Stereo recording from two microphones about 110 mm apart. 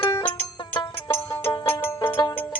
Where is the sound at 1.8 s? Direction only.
20° left (ahead or behind).